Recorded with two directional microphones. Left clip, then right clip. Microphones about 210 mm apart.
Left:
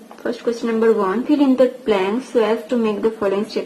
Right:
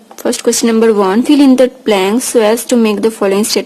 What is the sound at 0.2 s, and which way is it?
A woman's voice, 50° right (ahead or behind).